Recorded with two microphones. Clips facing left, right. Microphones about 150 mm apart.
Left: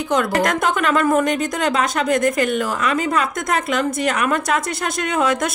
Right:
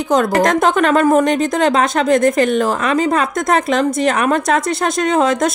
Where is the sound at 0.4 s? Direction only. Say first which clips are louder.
Right 6 dB; 40° right (ahead or behind).